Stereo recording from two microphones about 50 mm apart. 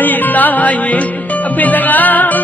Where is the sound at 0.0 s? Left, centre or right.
Left.